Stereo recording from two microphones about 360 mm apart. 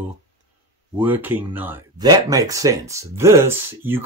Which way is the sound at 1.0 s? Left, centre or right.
Centre.